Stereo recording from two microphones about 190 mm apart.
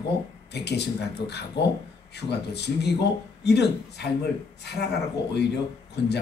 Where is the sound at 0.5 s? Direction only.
60° left (ahead or behind).